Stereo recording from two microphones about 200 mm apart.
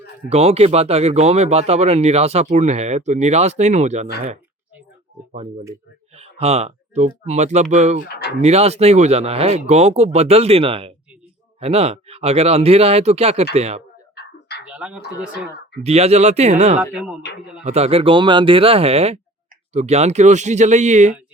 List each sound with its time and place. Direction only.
0.3 s speech: 30° right (ahead or behind)
6.4 s speech: 30° right (ahead or behind)
14.6 s a sound: 5° right (ahead or behind)
15.8 s speech: 30° right (ahead or behind)
16.9 s speech: 5° right (ahead or behind)
17.6 s speech: 30° right (ahead or behind)